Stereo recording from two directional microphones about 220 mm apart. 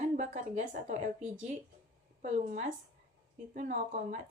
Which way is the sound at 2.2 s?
30° right (ahead or behind).